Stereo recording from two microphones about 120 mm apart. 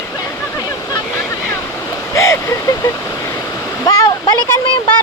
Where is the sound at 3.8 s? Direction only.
30° left (ahead or behind).